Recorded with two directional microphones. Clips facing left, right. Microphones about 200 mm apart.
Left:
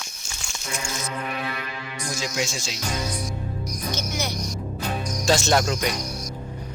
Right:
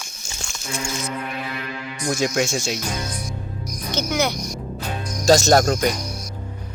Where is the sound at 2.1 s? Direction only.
55° right (ahead or behind).